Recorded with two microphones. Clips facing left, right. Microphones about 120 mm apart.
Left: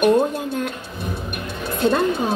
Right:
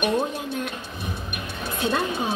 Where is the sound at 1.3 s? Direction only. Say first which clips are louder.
Left 4 dB; 45° left (ahead or behind).